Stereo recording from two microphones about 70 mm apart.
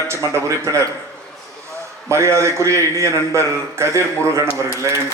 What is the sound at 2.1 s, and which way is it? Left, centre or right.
A man's voice, right.